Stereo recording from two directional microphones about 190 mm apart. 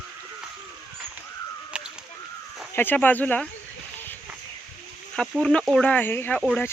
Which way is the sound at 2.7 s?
10° left (ahead or behind).